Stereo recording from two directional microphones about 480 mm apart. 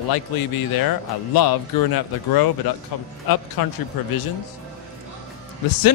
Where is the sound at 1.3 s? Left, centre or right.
Left.